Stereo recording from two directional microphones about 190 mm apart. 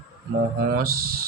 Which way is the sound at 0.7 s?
50° right (ahead or behind).